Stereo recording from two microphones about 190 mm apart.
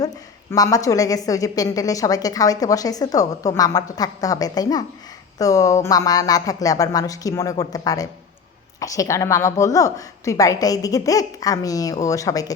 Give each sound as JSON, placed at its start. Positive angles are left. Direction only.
{"t": 0.5, "sound": "a woman's voice", "side_deg": 20}